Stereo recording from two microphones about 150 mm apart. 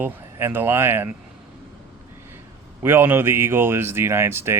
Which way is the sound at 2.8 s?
15° right (ahead or behind).